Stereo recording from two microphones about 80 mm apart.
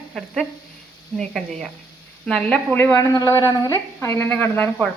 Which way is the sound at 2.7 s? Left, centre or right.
Left.